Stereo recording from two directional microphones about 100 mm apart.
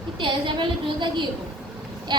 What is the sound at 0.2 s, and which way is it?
A woman's voice, 55° right (ahead or behind).